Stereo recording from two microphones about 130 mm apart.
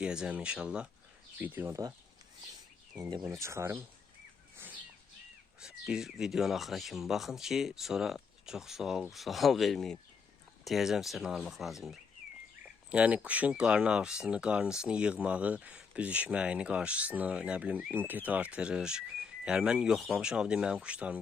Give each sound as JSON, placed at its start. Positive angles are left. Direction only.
{"t": 0.0, "sound": "speech", "side_deg": -5}
{"t": 3.0, "sound": "speech", "side_deg": -30}
{"t": 4.5, "sound": "bird", "side_deg": -15}
{"t": 5.5, "sound": "speech", "side_deg": -5}